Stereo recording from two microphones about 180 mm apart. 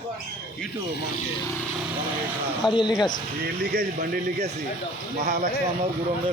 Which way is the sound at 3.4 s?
55° right (ahead or behind).